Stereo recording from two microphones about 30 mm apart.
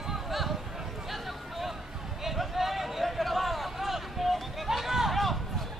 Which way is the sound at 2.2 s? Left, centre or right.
Centre.